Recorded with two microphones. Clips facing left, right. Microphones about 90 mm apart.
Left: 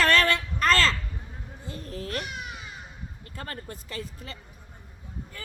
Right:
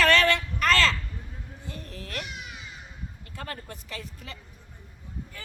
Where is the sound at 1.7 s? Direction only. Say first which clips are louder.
Left 5 dB; 40° left (ahead or behind).